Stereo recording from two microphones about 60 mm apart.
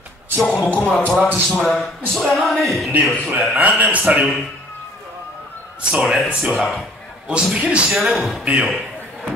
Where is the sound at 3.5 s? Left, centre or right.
Right.